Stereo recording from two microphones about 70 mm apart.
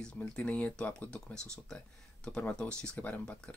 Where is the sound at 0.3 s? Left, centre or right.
Centre.